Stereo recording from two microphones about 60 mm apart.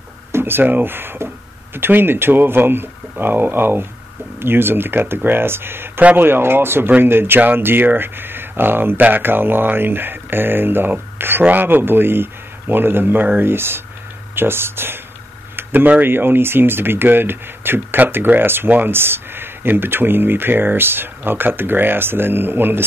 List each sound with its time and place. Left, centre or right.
0.3 s speech: right